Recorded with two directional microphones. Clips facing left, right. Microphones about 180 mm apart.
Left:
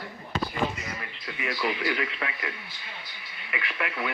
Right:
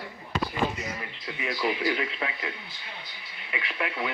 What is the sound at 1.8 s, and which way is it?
Speech, 30° right (ahead or behind).